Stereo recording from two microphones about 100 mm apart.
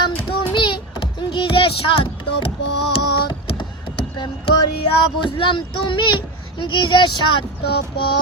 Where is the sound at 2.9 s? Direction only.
60° left (ahead or behind).